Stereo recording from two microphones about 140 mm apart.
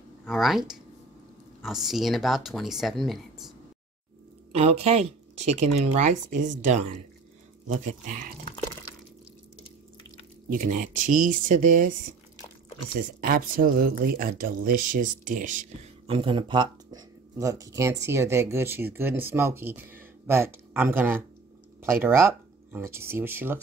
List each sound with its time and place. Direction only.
0.3 s speech: centre (ahead or behind)
4.5 s speech: 50° right (ahead or behind)
7.6 s speech: 70° right (ahead or behind)
10.5 s speech: 70° right (ahead or behind)
12.9 s speech: 90° right; by 15.7 s 65° right (ahead or behind)
16.1 s speech: 40° right (ahead or behind)
17.4 s speech: 25° right (ahead or behind)